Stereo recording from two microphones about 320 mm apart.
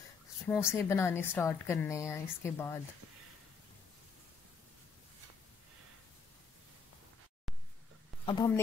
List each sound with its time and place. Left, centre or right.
0.5 s a woman's voice: centre
8.3 s a woman's voice: centre